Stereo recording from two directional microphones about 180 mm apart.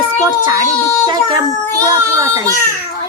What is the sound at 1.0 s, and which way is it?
A woman's voice, 25° right (ahead or behind).